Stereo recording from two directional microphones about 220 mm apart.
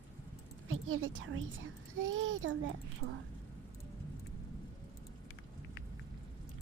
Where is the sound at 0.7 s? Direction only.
65° right (ahead or behind).